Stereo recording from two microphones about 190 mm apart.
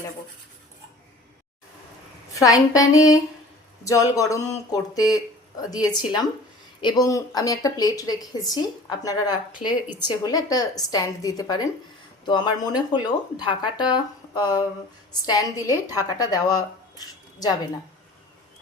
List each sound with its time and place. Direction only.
2.3 s a woman's voice: 20° left (ahead or behind)
9.6 s speech: 5° right (ahead or behind)
10.2 s a woman's voice: 20° left (ahead or behind)